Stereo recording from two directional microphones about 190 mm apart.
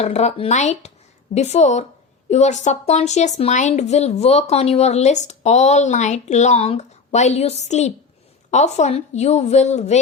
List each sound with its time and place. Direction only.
0.0 s speech: 35° left (ahead or behind)